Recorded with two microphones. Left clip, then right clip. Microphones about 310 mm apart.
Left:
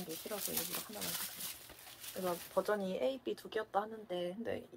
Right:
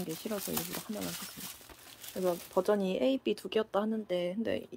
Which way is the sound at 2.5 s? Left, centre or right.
Right.